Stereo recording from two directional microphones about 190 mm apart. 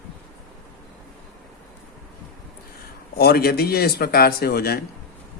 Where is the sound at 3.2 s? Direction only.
55° left (ahead or behind).